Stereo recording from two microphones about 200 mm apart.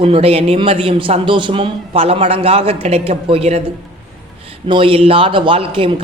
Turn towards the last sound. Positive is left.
turn(degrees=-25)  # may be behind; listen again after turning